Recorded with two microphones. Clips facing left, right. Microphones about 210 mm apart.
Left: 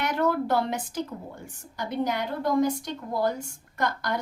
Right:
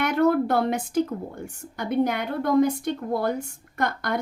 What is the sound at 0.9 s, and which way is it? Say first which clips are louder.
A woman's voice: right 8 dB; 55° right (ahead or behind).